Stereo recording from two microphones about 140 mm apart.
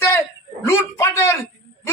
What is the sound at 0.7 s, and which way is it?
Speech, 20° left (ahead or behind).